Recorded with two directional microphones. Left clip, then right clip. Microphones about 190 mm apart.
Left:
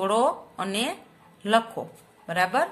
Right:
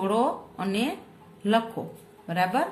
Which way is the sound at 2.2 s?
25° left (ahead or behind).